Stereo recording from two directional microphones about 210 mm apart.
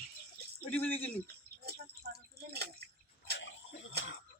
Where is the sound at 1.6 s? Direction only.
50° right (ahead or behind).